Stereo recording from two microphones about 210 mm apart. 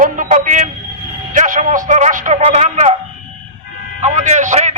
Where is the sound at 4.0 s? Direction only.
35° right (ahead or behind).